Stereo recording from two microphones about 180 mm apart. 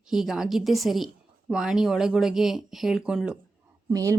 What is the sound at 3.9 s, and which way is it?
Speech, 20° right (ahead or behind).